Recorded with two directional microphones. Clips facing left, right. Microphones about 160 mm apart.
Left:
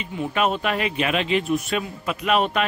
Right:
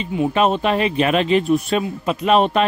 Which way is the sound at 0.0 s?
30° right (ahead or behind).